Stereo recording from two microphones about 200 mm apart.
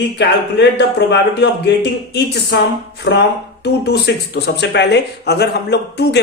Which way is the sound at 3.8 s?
55° left (ahead or behind).